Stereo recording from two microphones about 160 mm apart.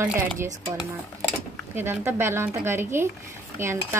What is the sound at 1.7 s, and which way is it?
A woman's voice, 15° right (ahead or behind).